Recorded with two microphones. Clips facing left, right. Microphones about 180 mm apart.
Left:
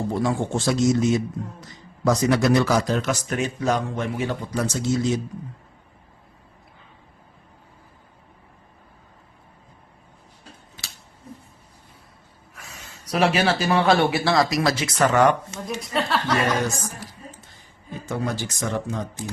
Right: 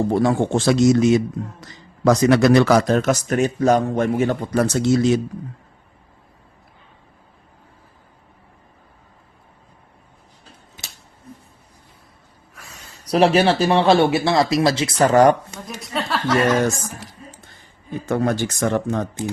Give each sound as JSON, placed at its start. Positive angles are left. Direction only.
{"t": 0.1, "sound": "a man's voice", "side_deg": -60}
{"t": 13.1, "sound": "speech", "side_deg": -35}
{"t": 15.8, "sound": "speech", "side_deg": 0}
{"t": 16.6, "sound": "speech", "side_deg": -50}
{"t": 18.0, "sound": "speech", "side_deg": -60}